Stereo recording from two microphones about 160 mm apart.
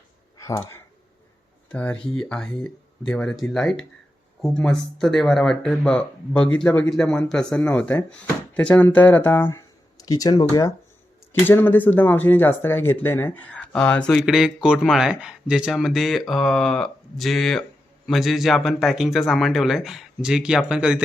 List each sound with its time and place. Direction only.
0.3 s a sound: 20° left (ahead or behind)
1.7 s speech: 10° left (ahead or behind); by 10.7 s 25° left (ahead or behind)
11.3 s speech: 15° left (ahead or behind)
14.3 s speech: 5° right (ahead or behind)